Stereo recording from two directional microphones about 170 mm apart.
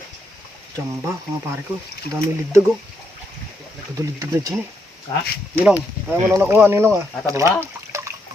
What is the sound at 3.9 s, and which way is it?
Speech, 20° right (ahead or behind).